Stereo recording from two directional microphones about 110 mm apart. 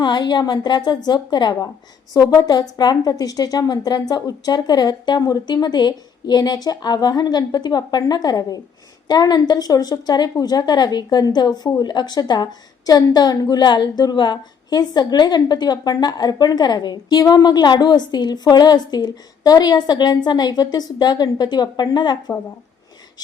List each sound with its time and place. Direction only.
0.0 s a woman's voice: 45° left (ahead or behind)